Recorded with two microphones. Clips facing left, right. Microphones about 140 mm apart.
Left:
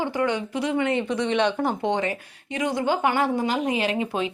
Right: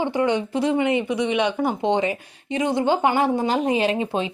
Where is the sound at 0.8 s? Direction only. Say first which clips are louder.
Right 3 dB; 15° right (ahead or behind).